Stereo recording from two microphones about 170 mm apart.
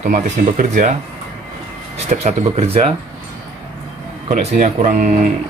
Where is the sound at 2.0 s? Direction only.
40° right (ahead or behind).